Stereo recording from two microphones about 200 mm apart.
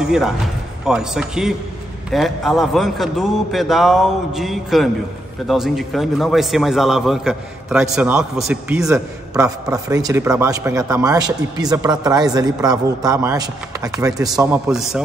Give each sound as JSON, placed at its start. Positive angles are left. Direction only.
{"t": 0.8, "sound": "a man's voice", "side_deg": -5}
{"t": 9.3, "sound": "speech", "side_deg": -15}
{"t": 14.7, "sound": "a man's voice", "side_deg": 0}